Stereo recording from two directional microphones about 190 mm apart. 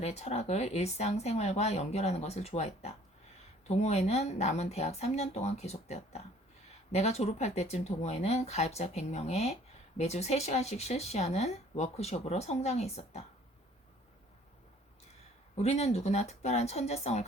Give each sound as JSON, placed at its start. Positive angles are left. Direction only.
{"t": 0.0, "sound": "speech", "side_deg": 35}
{"t": 15.5, "sound": "speech", "side_deg": 35}